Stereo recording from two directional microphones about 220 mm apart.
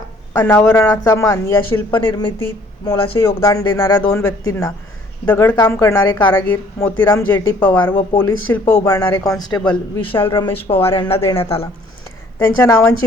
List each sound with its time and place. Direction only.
0.3 s speech: 10° left (ahead or behind)
1.9 s a man's voice: 20° left (ahead or behind)
3.2 s a man's voice: 10° left (ahead or behind)
12.5 s speech: 10° left (ahead or behind)